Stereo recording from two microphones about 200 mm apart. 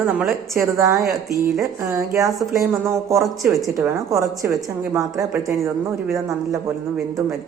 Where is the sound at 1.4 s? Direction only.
15° right (ahead or behind).